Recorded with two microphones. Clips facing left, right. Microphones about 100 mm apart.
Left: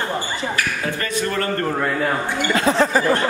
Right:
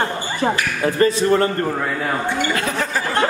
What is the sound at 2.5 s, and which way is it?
Speech, 25° left (ahead or behind).